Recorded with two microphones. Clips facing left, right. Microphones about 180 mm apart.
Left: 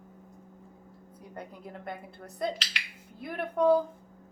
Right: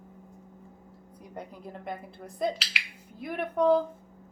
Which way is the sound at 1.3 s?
Centre (ahead or behind).